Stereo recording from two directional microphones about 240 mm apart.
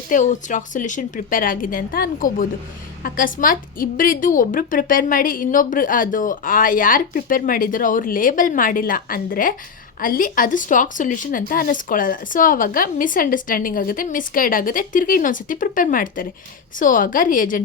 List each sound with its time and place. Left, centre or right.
0.1 s a woman's voice: left